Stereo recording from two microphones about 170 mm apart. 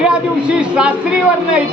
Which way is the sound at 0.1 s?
5° right (ahead or behind).